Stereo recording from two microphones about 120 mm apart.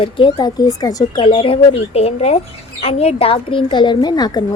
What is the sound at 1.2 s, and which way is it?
Speech, 45° left (ahead or behind).